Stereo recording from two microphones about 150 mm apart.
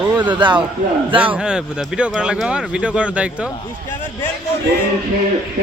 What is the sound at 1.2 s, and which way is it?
Speech, 10° right (ahead or behind).